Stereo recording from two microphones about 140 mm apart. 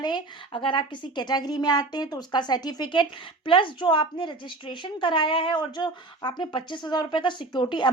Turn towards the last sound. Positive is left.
turn(degrees=35)  # may be behind; listen again after turning